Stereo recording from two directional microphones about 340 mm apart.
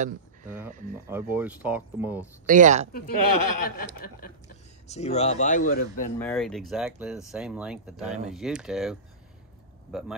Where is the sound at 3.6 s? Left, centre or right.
Left.